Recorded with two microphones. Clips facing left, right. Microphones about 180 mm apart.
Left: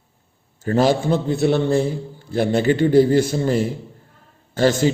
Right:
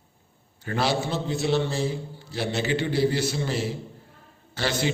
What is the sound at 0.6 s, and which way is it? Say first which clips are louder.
A man's voice: left 8 dB; 45° left (ahead or behind).